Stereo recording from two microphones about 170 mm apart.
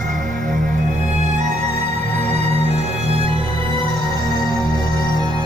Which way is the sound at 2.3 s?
35° right (ahead or behind).